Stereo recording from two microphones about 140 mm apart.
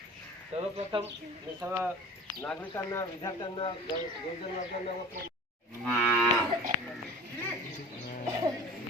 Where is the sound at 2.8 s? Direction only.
25° left (ahead or behind).